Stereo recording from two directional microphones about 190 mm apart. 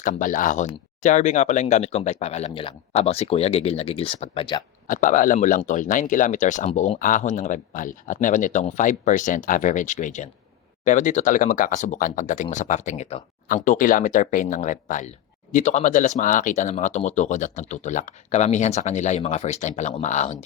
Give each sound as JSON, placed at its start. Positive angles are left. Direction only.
{"t": 0.0, "sound": "speech", "side_deg": 45}
{"t": 4.9, "sound": "speech", "side_deg": 45}